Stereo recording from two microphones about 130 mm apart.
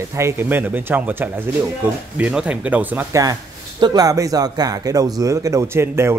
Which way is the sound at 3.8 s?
30° right (ahead or behind).